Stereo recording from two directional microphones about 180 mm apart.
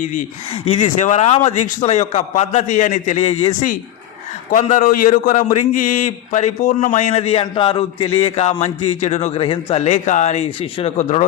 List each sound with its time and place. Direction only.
0.0 s a man's voice: 45° left (ahead or behind)